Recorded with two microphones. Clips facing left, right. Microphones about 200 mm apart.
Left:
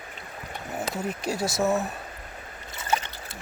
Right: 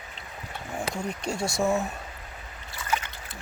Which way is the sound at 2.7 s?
30° left (ahead or behind).